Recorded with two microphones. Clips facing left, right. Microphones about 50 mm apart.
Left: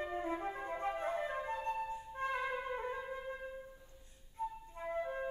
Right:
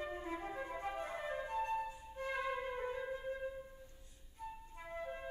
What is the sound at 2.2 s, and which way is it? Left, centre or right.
Music, left.